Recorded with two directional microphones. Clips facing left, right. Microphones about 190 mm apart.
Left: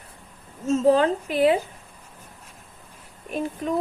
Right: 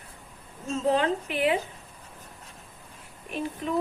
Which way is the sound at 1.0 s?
35° left (ahead or behind).